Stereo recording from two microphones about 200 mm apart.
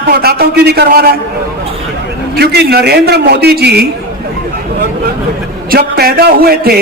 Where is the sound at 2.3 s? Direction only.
55° right (ahead or behind).